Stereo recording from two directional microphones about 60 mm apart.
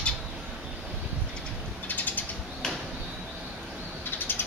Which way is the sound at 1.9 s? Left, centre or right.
Left.